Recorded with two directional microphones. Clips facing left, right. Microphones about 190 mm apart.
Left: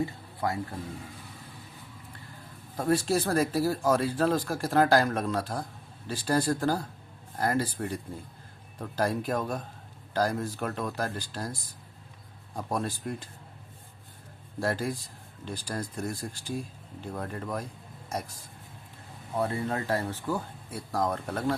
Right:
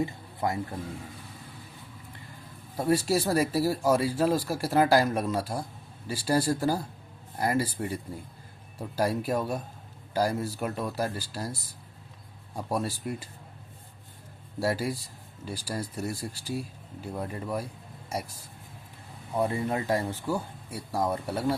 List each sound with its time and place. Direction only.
0.0 s speech: 20° right (ahead or behind)
2.7 s speech: 10° right (ahead or behind)
14.6 s speech: 10° right (ahead or behind)